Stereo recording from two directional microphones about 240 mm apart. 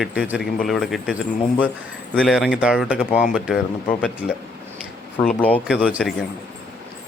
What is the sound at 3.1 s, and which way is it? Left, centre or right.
Speech, left.